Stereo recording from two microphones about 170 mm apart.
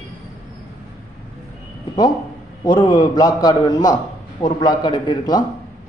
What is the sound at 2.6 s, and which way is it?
A man's voice, 25° left (ahead or behind).